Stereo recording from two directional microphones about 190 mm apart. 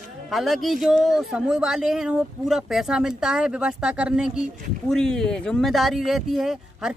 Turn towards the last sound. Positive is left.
turn(degrees=-5)  # may be behind; listen again after turning